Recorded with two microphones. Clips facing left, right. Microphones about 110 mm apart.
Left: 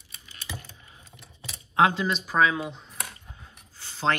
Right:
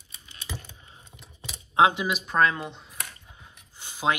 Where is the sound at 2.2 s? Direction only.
Centre (ahead or behind).